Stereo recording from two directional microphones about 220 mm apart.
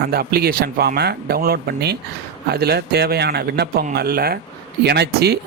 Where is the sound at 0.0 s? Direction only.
45° right (ahead or behind).